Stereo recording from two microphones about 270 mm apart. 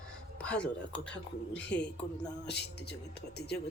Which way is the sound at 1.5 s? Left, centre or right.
Left.